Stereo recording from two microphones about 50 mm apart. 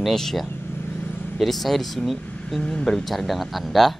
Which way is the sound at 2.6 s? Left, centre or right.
Left.